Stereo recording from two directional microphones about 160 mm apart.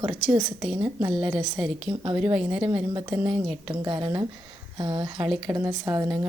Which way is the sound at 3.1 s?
10° right (ahead or behind).